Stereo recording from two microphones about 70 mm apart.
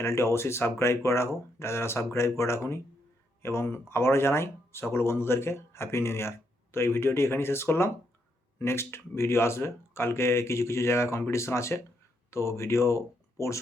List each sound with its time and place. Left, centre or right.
0.0 s speech: left